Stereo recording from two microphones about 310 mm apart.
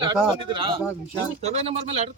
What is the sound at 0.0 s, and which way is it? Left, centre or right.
Speech, centre.